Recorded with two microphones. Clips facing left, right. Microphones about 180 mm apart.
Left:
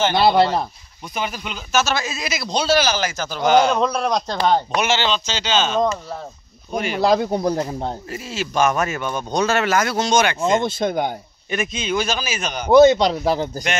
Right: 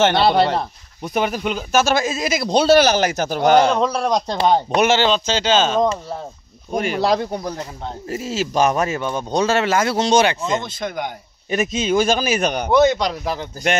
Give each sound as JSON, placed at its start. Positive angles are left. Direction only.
{"t": 0.0, "sound": "speech", "side_deg": -75}
{"t": 1.0, "sound": "speech", "side_deg": -55}
{"t": 3.8, "sound": "speech", "side_deg": -5}
{"t": 4.8, "sound": "speech", "side_deg": -50}
{"t": 7.2, "sound": "speech", "side_deg": 35}
{"t": 8.1, "sound": "speech", "side_deg": -40}
{"t": 10.4, "sound": "speech", "side_deg": 30}
{"t": 11.5, "sound": "speech", "side_deg": -40}
{"t": 12.7, "sound": "speech", "side_deg": 25}